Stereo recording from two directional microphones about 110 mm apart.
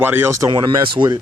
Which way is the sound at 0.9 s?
35° right (ahead or behind).